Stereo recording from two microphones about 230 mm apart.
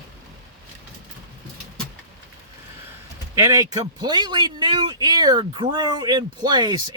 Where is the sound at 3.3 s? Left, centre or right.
Centre.